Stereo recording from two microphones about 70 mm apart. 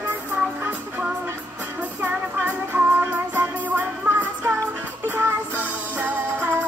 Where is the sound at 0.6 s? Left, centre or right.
Right.